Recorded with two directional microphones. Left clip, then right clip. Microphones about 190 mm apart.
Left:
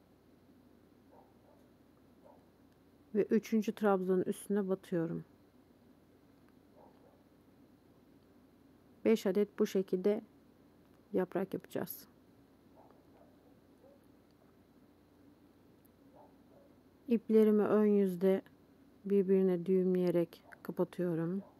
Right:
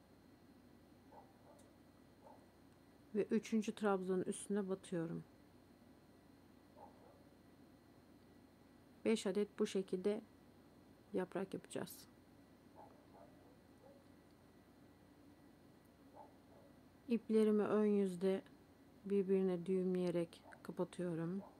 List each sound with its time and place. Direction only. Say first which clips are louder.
3.2 s speech: left 7 dB; 20° left (ahead or behind)
9.0 s speech: left 8 dB; 20° left (ahead or behind)
17.1 s speech: left 7 dB; 20° left (ahead or behind)